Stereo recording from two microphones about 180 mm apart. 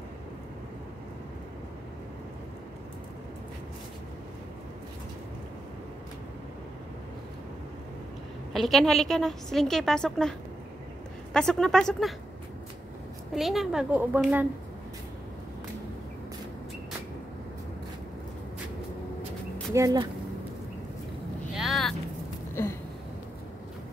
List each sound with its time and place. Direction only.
8.5 s a woman's voice: centre (ahead or behind)
11.3 s a woman's voice: 5° left (ahead or behind)
13.3 s a woman's voice: centre (ahead or behind)
19.7 s speech: 20° right (ahead or behind)
21.5 s vehicle: centre (ahead or behind)